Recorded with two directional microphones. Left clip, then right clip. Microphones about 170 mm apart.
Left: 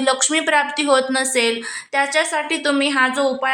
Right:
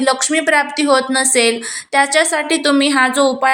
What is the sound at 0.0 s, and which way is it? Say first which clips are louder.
A woman's voice: right 3 dB; 5° right (ahead or behind).